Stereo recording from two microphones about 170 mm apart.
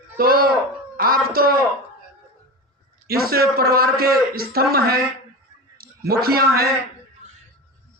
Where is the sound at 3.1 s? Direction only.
65° right (ahead or behind).